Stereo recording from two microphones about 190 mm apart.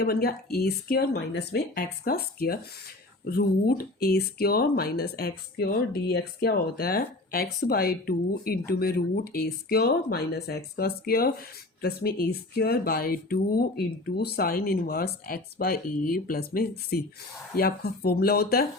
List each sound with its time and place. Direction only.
0.0 s speech: 55° left (ahead or behind)
4.0 s speech: 55° left (ahead or behind)